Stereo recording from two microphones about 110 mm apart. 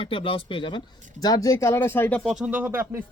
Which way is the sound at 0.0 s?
55° left (ahead or behind).